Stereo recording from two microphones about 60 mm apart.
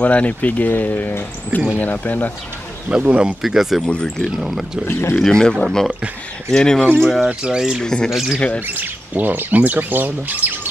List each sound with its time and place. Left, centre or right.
0.0 s speech: left
2.9 s speech: centre
3.4 s speech: centre
3.8 s speech: centre
4.4 s speech: centre
5.2 s speech: centre
7.0 s speech: centre
7.2 s speech: centre
7.8 s speech: centre
8.1 s speech: centre
8.4 s speech: left
8.6 s speech: right